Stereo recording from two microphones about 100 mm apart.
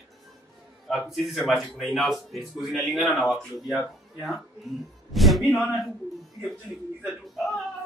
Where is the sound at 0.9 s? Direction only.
Centre (ahead or behind).